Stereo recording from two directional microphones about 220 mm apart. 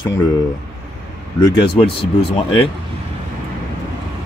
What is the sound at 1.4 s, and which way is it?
Speech, 20° left (ahead or behind).